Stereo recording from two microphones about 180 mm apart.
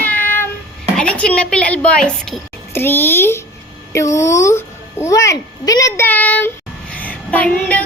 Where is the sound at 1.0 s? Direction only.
5° left (ahead or behind).